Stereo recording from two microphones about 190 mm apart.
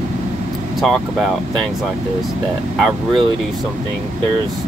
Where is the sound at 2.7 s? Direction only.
Centre (ahead or behind).